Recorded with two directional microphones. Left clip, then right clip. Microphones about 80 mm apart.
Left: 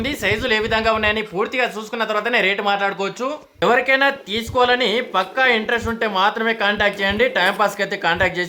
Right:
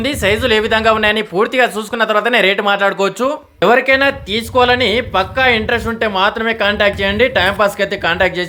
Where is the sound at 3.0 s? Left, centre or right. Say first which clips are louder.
Right 8 dB; right.